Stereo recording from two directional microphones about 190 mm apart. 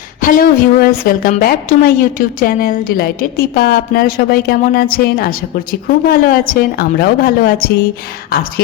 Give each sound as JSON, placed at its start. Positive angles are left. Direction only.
{"t": 0.2, "sound": "a woman's voice", "side_deg": 45}